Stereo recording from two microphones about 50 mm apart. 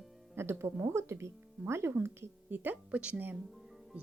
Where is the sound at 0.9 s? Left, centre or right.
Right.